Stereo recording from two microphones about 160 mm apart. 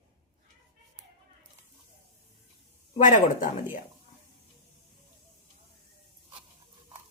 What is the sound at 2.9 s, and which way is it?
Speech, 50° left (ahead or behind).